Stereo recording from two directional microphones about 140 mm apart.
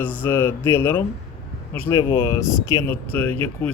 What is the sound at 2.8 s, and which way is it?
Speech, 10° left (ahead or behind).